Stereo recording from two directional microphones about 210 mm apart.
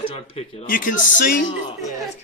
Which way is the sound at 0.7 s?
40° left (ahead or behind).